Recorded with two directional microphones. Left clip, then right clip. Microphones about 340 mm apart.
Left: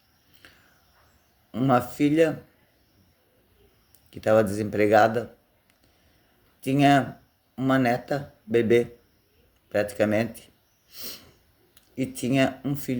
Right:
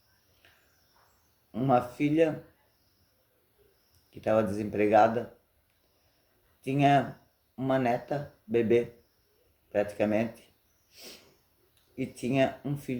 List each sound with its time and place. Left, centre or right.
1.5 s speech: left
4.1 s speech: left
6.6 s speech: left
10.9 s sneeze: left
11.7 s speech: left